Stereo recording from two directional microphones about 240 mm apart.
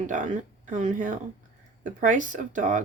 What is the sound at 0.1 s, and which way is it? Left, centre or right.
Speech, right.